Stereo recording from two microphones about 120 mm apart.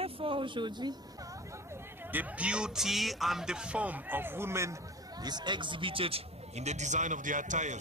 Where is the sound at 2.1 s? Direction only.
10° right (ahead or behind).